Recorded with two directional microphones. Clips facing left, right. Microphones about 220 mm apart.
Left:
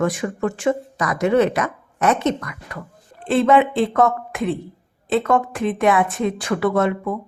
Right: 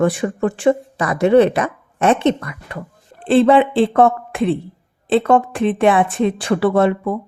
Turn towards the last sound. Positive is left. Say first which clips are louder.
# right 4 dB
turn(degrees=-30)  # may be behind; listen again after turning